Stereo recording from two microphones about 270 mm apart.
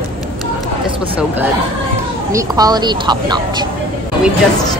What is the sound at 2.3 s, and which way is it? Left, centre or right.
A woman's voice, centre.